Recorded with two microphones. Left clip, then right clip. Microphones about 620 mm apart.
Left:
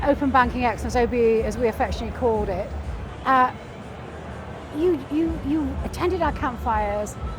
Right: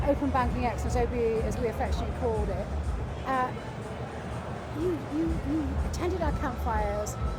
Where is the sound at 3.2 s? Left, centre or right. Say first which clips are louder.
Left 11 dB; left.